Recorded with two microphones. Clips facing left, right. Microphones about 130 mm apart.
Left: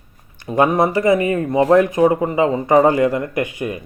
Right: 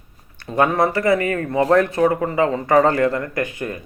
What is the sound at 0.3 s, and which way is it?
A man's voice, 15° left (ahead or behind).